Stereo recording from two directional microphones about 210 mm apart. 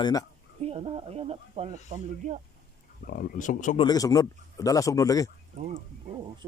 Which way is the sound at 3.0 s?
45° left (ahead or behind).